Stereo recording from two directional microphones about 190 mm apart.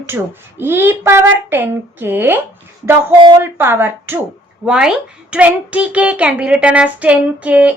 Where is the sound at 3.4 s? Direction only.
10° right (ahead or behind).